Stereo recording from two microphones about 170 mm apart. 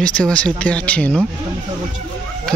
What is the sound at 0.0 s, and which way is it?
Speech, 5° left (ahead or behind).